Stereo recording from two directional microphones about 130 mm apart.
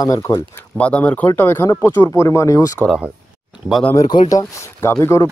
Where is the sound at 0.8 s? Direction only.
10° left (ahead or behind); by 2.7 s 25° left (ahead or behind).